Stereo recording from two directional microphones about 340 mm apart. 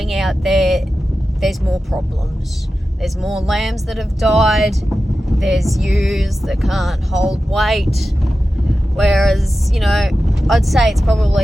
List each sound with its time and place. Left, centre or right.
0.0 s speech: centre
3.0 s speech: centre